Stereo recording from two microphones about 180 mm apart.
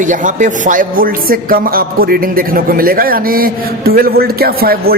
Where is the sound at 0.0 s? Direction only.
45° right (ahead or behind).